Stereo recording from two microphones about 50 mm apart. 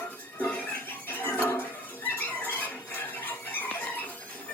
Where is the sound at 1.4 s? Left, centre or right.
Left.